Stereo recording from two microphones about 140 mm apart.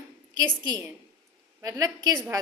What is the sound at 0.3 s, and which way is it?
A woman's voice, 30° right (ahead or behind).